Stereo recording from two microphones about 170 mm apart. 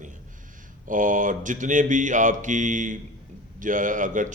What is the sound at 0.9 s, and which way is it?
A man's voice, 50° right (ahead or behind).